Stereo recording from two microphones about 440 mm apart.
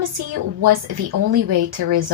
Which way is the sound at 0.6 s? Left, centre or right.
Right.